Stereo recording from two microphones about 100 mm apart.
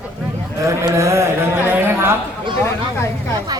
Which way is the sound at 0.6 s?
30° right (ahead or behind).